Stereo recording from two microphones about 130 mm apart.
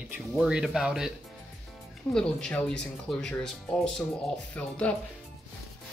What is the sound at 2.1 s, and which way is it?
Speech, 5° left (ahead or behind).